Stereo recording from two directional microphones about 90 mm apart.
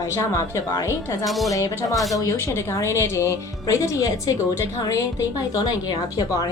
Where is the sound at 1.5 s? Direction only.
40° left (ahead or behind).